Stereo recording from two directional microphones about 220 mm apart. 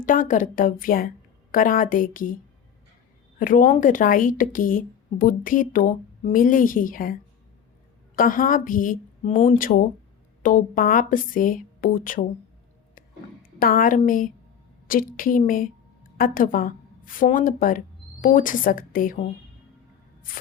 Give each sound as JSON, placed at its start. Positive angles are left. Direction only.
{"t": 0.0, "sound": "speech", "side_deg": 35}
{"t": 13.6, "sound": "a woman's voice", "side_deg": 40}